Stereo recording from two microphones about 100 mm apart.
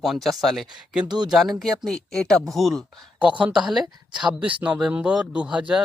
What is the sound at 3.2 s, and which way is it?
Speech, 15° right (ahead or behind).